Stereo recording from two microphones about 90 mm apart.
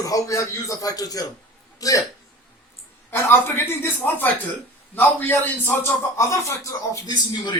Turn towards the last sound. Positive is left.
turn(degrees=55)  # may be behind; listen again after turning